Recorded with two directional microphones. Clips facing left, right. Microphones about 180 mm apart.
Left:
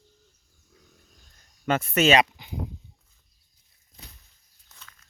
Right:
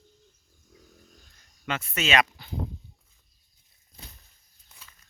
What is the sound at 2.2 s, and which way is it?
Speech, 15° left (ahead or behind).